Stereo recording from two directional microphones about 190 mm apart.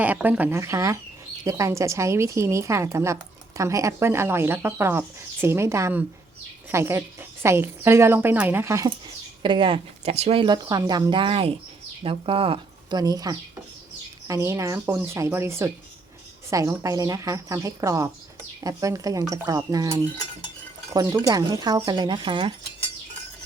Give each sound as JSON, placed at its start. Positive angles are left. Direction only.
{"t": 0.0, "sound": "speech", "side_deg": -10}
{"t": 9.4, "sound": "speech", "side_deg": -25}